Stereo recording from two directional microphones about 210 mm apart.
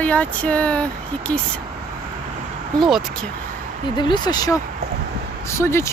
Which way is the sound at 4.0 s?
20° left (ahead or behind).